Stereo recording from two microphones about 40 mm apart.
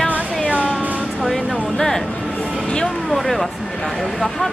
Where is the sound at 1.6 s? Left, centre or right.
Centre.